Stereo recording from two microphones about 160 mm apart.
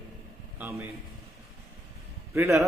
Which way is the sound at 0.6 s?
15° right (ahead or behind).